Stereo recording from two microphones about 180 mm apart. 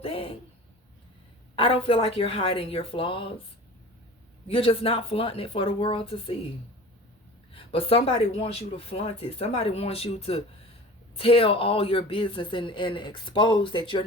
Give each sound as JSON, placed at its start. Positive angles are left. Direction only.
{"t": 0.0, "sound": "a sound", "side_deg": 30}
{"t": 1.5, "sound": "speech", "side_deg": 30}
{"t": 4.4, "sound": "speech", "side_deg": 30}
{"t": 7.5, "sound": "speech", "side_deg": 30}